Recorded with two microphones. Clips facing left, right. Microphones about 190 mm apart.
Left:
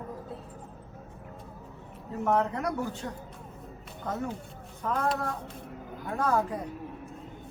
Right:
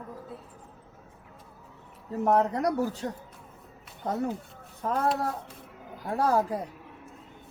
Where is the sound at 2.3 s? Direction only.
35° right (ahead or behind).